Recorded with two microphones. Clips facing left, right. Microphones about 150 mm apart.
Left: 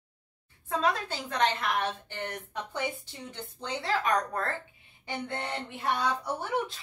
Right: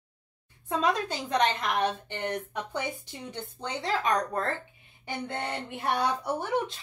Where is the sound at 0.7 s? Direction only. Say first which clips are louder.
Right 2 dB; 15° right (ahead or behind).